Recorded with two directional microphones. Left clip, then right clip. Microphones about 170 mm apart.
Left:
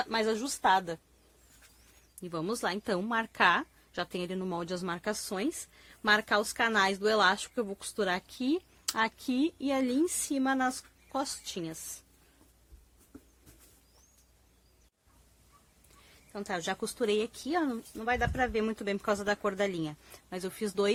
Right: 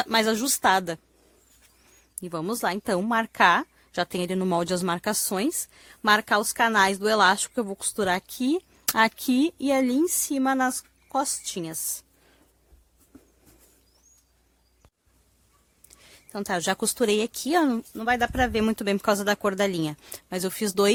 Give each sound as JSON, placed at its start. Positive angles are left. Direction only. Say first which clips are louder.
{"t": 0.0, "sound": "speech", "louder": "right 7 dB", "side_deg": -80}
{"t": 2.2, "sound": "a woman's voice", "louder": "right 6 dB", "side_deg": -45}
{"t": 16.3, "sound": "speech", "louder": "right 8 dB", "side_deg": -60}